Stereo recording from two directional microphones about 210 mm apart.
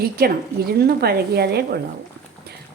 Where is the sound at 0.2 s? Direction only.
45° right (ahead or behind).